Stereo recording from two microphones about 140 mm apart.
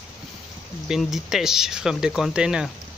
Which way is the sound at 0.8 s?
Centre (ahead or behind).